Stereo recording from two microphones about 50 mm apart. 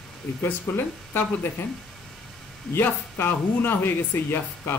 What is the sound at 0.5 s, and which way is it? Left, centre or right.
Speech, left.